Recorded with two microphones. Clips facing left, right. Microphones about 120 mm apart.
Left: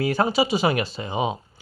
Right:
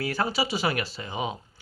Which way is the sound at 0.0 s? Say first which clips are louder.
Left 6 dB; 20° left (ahead or behind).